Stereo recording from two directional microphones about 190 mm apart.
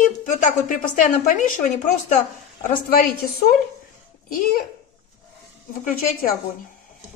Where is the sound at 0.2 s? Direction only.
40° left (ahead or behind).